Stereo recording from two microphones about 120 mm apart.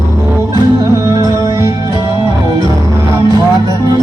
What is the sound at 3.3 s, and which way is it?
Music, 30° right (ahead or behind).